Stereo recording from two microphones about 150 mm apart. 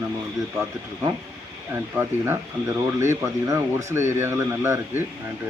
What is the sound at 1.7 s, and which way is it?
Speech, 15° right (ahead or behind).